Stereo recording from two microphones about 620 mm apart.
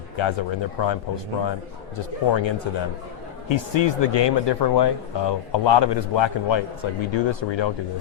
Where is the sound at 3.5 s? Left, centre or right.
Left.